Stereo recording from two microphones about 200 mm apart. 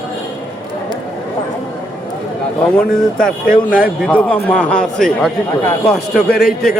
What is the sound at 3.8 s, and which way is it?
A man's voice, 5° left (ahead or behind).